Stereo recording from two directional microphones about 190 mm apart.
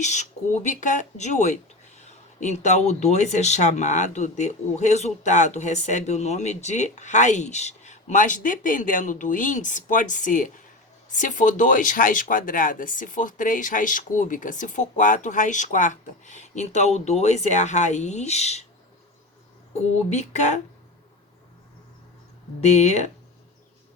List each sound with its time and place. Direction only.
0.0 s speech: 40° left (ahead or behind)
20.1 s speech: 35° left (ahead or behind)
22.6 s speech: 35° left (ahead or behind)